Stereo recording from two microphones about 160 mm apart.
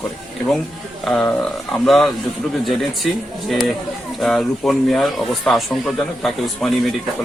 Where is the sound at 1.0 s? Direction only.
5° left (ahead or behind).